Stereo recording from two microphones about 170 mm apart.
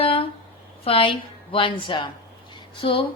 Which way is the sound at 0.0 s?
35° left (ahead or behind).